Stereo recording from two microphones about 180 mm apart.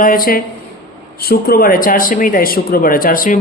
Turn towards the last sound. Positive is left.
turn(degrees=50)  # may be behind; listen again after turning